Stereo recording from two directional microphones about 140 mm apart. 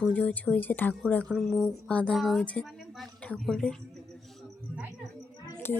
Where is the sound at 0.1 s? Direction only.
10° left (ahead or behind).